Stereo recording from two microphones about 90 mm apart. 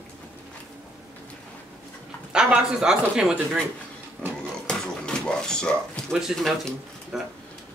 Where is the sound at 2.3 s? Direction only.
5° right (ahead or behind).